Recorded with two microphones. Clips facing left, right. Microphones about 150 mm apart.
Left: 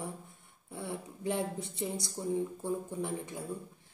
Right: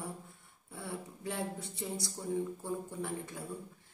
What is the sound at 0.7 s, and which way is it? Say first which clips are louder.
A woman's voice: left 3 dB; 20° left (ahead or behind).